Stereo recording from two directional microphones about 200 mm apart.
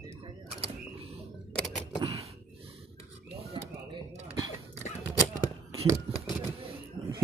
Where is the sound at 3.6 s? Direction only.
25° right (ahead or behind).